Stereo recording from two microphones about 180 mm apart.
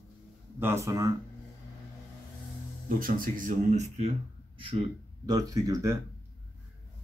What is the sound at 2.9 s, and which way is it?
Speech, 50° right (ahead or behind).